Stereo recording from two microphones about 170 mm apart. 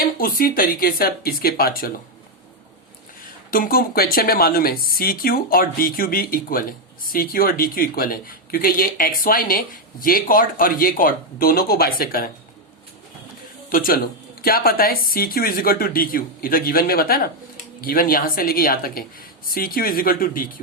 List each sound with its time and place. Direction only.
0.0 s speech: 60° left (ahead or behind)
3.5 s speech: 60° left (ahead or behind)
13.7 s speech: 55° left (ahead or behind)